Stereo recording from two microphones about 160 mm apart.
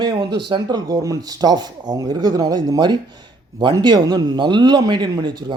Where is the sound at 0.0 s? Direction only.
25° right (ahead or behind).